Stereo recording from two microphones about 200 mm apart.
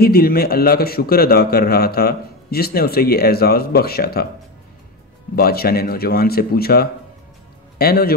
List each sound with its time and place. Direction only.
0.0 s a man's voice: 50° left (ahead or behind)
5.3 s a man's voice: 50° left (ahead or behind)